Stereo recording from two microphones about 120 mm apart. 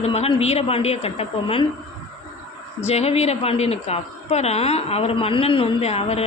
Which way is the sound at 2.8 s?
60° left (ahead or behind).